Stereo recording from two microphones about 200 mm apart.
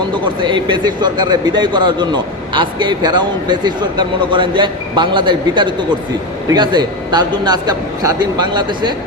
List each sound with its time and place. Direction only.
0.1 s speech: 25° right (ahead or behind)